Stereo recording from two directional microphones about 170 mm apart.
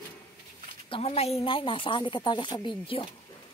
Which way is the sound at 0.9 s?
35° left (ahead or behind).